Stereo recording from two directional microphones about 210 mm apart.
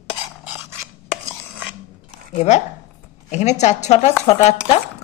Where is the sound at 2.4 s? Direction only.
35° left (ahead or behind).